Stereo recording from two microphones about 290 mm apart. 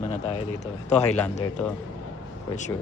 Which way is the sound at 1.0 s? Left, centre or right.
Centre.